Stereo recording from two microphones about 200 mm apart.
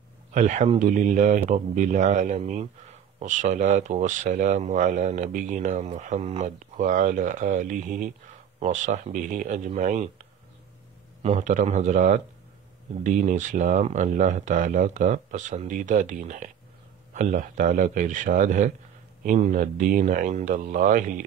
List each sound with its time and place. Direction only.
0.3 s speech: 35° right (ahead or behind)
11.2 s speech: 40° right (ahead or behind)